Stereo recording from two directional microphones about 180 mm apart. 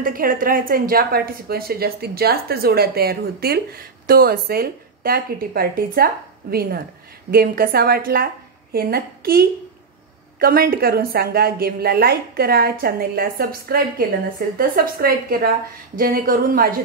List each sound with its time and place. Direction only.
0.0 s a woman's voice: 50° right (ahead or behind)
7.2 s a woman's voice: 55° right (ahead or behind)
10.4 s a woman's voice: 55° right (ahead or behind)